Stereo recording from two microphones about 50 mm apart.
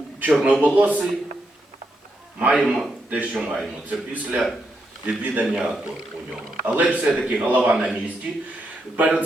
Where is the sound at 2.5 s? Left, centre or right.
Centre.